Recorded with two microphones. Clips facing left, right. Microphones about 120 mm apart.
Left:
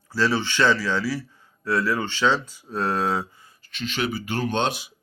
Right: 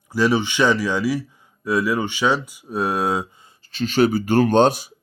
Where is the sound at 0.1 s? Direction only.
15° right (ahead or behind).